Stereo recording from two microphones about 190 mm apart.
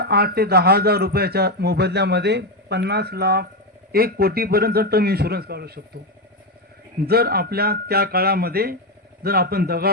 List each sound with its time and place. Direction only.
0.0 s a man's voice: 55° right (ahead or behind)
7.0 s speech: 55° right (ahead or behind)